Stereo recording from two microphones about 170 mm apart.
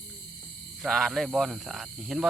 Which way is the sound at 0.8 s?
Centre (ahead or behind).